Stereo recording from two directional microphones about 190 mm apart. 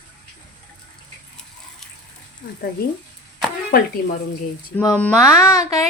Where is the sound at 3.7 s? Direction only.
50° left (ahead or behind).